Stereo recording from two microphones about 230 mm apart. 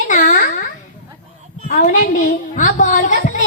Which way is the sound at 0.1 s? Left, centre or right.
Left.